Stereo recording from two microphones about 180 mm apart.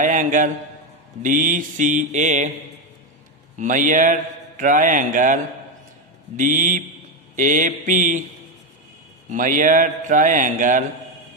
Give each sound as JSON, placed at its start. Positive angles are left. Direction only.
{"t": 0.0, "sound": "a man's voice", "side_deg": -45}
{"t": 3.5, "sound": "a man's voice", "side_deg": -45}
{"t": 9.3, "sound": "a man's voice", "side_deg": -45}